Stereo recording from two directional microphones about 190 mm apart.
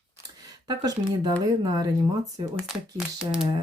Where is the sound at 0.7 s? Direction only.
20° right (ahead or behind).